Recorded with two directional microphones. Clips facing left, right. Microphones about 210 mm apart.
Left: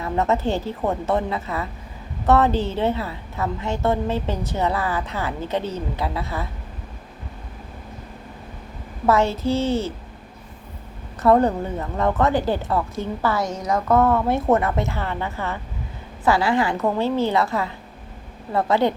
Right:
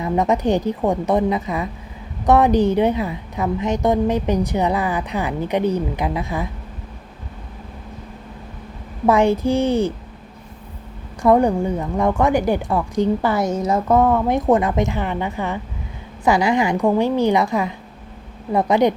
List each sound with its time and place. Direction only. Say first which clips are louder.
0.0 s speech: right 3 dB; 15° right (ahead or behind)
9.0 s speech: right 4 dB; 15° right (ahead or behind)
11.2 s speech: right 2 dB; 15° right (ahead or behind)